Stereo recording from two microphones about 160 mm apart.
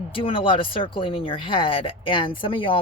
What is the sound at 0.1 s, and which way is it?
Speech, 35° left (ahead or behind).